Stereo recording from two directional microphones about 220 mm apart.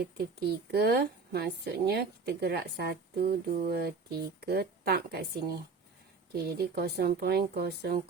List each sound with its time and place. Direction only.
0.0 s a woman's voice: 45° right (ahead or behind)